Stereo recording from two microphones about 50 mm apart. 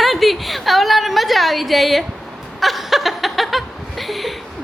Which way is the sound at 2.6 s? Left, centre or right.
Centre.